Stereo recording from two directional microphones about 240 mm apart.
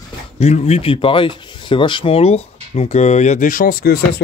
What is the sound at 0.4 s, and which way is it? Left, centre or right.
Speech, left.